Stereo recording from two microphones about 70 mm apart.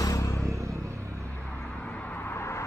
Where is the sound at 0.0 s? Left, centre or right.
Left.